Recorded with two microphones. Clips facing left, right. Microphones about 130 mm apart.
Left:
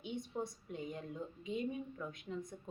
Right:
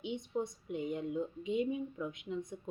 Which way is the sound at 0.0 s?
20° right (ahead or behind).